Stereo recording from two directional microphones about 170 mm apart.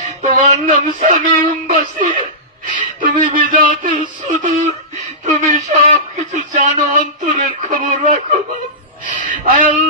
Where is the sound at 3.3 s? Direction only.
50° right (ahead or behind).